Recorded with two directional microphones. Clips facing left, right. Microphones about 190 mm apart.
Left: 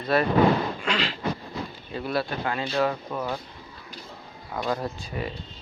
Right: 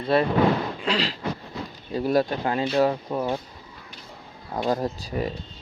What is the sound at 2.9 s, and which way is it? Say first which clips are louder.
Speech: right 4 dB; 20° right (ahead or behind).